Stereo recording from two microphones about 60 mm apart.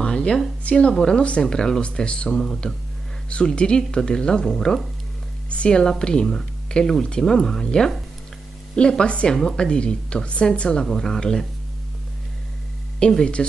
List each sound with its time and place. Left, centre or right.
0.0 s a sound: centre
0.7 s a woman's voice: centre
5.5 s a woman's voice: centre
13.0 s a woman's voice: centre